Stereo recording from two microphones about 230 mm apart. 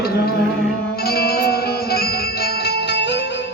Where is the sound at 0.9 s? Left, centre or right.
Left.